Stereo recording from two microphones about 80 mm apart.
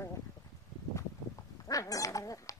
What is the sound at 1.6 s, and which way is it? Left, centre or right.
Dog, left.